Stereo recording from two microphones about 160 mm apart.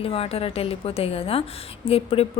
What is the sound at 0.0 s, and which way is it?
A woman's voice, 40° left (ahead or behind).